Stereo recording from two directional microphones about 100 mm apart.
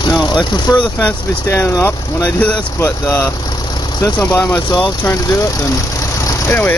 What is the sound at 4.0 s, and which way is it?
Speech, 35° left (ahead or behind).